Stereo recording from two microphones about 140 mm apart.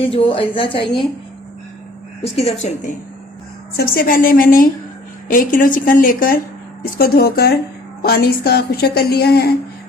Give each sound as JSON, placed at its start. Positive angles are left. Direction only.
{"t": 0.0, "sound": "a woman's voice", "side_deg": 40}
{"t": 2.2, "sound": "speech", "side_deg": 50}
{"t": 3.8, "sound": "a woman's voice", "side_deg": 90}
{"t": 5.3, "sound": "a woman's voice", "side_deg": 70}